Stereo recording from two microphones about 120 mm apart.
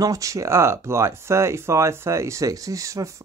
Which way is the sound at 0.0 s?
25° right (ahead or behind).